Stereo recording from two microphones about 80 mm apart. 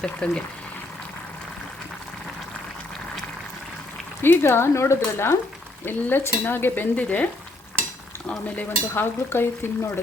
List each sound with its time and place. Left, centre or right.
0.0 s speech: centre
4.2 s speech: left
5.8 s stir: left
8.4 s stir: left
8.9 s speech: left